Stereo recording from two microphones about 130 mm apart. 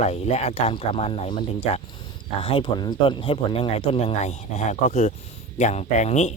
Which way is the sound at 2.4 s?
45° left (ahead or behind).